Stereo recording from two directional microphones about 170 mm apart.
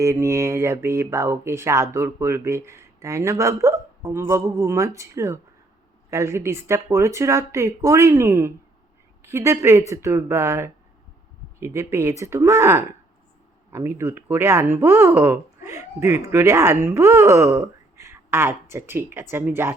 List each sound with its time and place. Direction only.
0.0 s speech: 15° right (ahead or behind)